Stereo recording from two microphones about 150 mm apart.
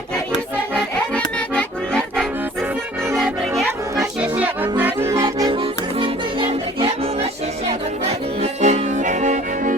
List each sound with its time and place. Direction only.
1.1 s music: 5° left (ahead or behind)
3.6 s music: 5° right (ahead or behind)
5.2 s music: 30° right (ahead or behind)
8.4 s accordion: 50° right (ahead or behind)